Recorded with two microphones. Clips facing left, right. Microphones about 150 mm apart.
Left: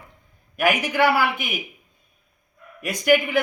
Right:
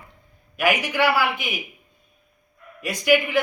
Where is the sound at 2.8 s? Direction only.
50° left (ahead or behind).